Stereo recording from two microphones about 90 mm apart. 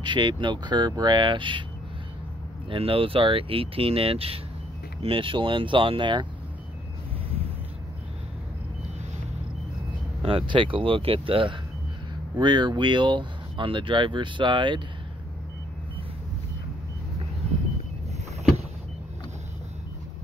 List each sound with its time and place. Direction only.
0.0 s speech: 65° right (ahead or behind)
2.7 s speech: 85° right; by 6.2 s 60° right (ahead or behind)
10.2 s speech: 75° right (ahead or behind)
12.4 s speech: 55° right (ahead or behind)